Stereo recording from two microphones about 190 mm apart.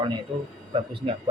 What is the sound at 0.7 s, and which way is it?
Speech, 25° right (ahead or behind).